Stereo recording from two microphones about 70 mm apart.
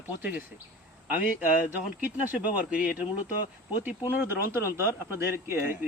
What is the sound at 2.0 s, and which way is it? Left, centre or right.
Speech, right.